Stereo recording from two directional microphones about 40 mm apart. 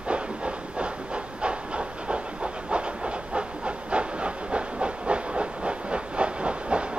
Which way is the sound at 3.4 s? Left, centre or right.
Right.